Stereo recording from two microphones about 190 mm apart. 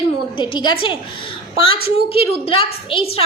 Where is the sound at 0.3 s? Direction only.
25° left (ahead or behind).